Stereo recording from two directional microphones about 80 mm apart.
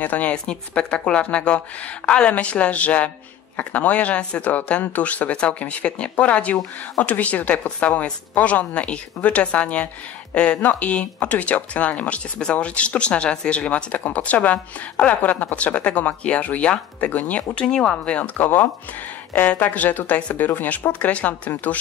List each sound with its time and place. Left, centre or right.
0.0 s speech: centre